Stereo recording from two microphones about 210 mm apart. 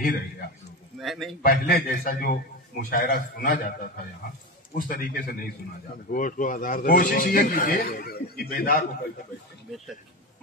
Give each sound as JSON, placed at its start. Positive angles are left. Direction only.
{"t": 0.9, "sound": "a man's voice", "side_deg": 0}
{"t": 1.4, "sound": "a man's voice", "side_deg": 45}
{"t": 4.7, "sound": "a man's voice", "side_deg": 45}